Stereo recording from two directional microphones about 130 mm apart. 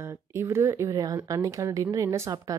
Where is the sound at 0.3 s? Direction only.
20° right (ahead or behind).